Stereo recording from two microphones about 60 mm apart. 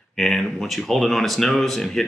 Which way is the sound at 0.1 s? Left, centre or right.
Centre.